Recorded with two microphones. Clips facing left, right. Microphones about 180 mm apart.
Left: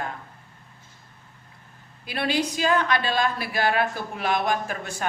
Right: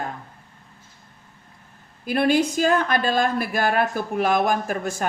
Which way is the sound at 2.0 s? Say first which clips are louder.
Right 6 dB; 50° right (ahead or behind).